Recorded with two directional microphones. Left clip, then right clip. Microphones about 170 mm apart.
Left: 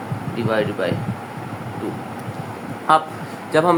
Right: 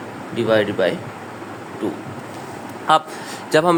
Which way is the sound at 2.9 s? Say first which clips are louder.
Even; 60° right (ahead or behind).